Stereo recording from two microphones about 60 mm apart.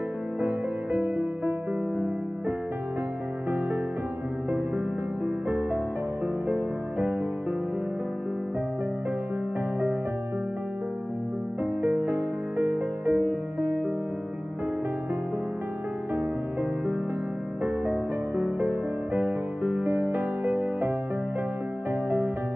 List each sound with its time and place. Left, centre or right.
0.4 s music: right
4.5 s music: right
11.8 s music: right
17.8 s music: right